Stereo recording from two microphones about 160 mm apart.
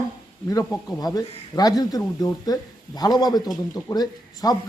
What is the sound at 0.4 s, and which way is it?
Speech, 20° left (ahead or behind).